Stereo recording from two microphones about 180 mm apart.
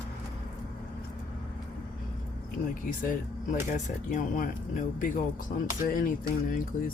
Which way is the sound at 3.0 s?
45° left (ahead or behind).